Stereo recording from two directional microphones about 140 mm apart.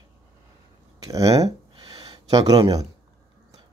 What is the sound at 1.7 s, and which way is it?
Gasp, 35° right (ahead or behind).